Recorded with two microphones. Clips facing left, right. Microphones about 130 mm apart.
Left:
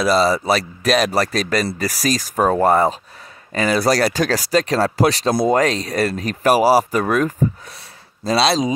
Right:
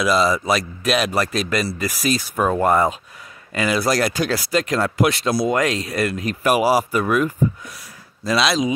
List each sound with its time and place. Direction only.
0.0 s speech: 35° left (ahead or behind)
5.3 s speech: 50° left (ahead or behind)
5.6 s speech: 35° left (ahead or behind)